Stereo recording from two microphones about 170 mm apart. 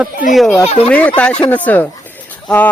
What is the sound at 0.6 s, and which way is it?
Speech, 35° left (ahead or behind).